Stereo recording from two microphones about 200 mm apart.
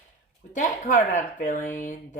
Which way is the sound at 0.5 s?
40° left (ahead or behind).